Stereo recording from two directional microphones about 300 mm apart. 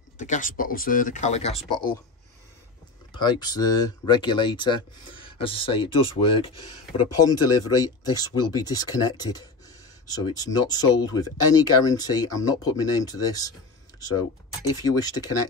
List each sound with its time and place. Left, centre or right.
0.2 s speech: left
3.1 s speech: centre